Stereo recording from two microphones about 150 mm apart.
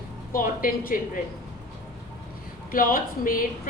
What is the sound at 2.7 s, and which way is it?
Speech, 70° left (ahead or behind).